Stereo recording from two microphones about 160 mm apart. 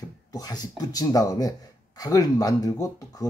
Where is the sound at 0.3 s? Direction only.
25° left (ahead or behind).